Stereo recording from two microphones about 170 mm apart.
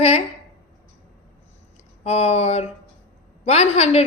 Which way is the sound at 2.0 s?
40° left (ahead or behind).